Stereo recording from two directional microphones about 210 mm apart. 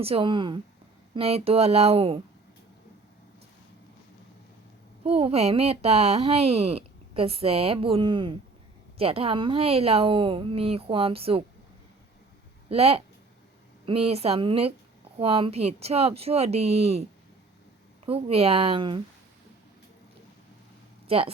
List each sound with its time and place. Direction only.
0.0 s speech: 25° right (ahead or behind)
5.0 s speech: 30° right (ahead or behind)
12.6 s speech: 30° right (ahead or behind)
21.1 s a woman's voice: 25° right (ahead or behind)